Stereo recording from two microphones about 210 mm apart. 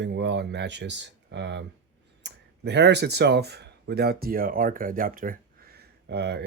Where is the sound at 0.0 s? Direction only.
55° right (ahead or behind).